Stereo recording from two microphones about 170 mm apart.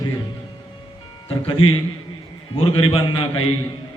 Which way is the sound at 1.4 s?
30° left (ahead or behind).